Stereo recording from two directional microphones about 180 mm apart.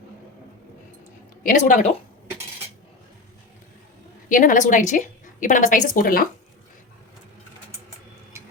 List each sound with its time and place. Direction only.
1.5 s a woman's voice: 45° left (ahead or behind)
4.3 s a woman's voice: 50° left (ahead or behind)
8.3 s tick-tock: 15° right (ahead or behind)